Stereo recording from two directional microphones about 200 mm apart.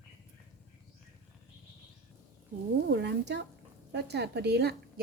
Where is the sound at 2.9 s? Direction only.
60° right (ahead or behind).